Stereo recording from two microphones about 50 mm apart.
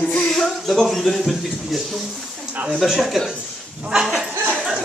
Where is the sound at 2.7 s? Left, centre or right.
Centre.